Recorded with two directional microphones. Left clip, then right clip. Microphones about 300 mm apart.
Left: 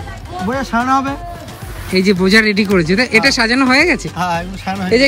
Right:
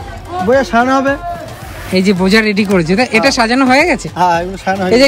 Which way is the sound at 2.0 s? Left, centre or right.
Centre.